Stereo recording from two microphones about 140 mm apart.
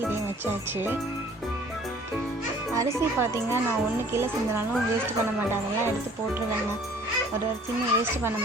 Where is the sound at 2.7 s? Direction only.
20° right (ahead or behind).